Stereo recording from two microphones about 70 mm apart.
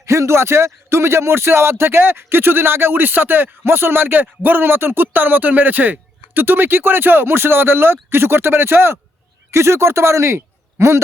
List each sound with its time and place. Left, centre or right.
0.0 s speech: right